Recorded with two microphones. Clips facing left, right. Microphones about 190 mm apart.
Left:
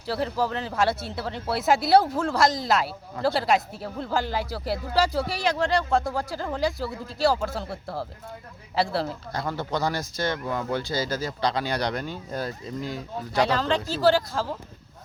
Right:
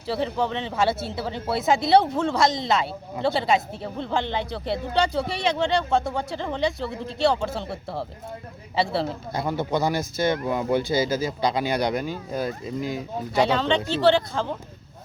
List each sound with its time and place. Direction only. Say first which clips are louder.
0.1 s a woman's voice: right 1 dB; centre (ahead or behind)
9.3 s speech: right 5 dB; 20° right (ahead or behind)
11.8 s speech: right 4 dB; 5° right (ahead or behind)
13.4 s a woman's voice: right 2 dB; centre (ahead or behind)